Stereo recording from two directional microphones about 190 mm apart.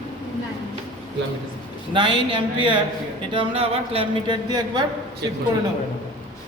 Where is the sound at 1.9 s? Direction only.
25° right (ahead or behind).